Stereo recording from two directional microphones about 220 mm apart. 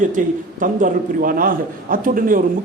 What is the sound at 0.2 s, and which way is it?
A man's voice, 35° right (ahead or behind).